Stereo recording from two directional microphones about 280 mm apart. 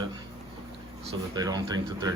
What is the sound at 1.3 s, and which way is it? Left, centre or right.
Speech, centre.